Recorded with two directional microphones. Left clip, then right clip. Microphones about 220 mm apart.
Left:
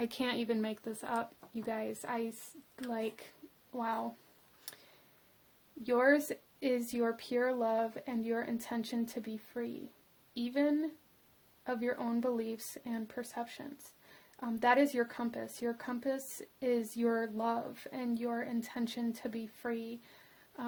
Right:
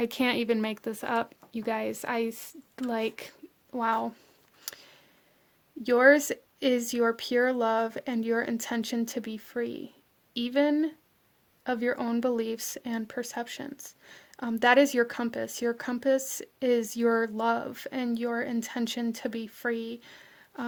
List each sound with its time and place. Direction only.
0.0 s speech: 30° right (ahead or behind)
4.7 s a sound: 35° right (ahead or behind)
5.8 s speech: 35° right (ahead or behind)